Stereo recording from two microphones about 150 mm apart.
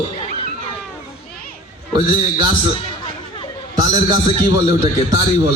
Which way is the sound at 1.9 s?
30° right (ahead or behind).